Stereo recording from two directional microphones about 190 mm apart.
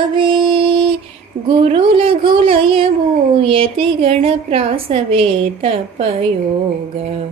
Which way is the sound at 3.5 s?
30° right (ahead or behind).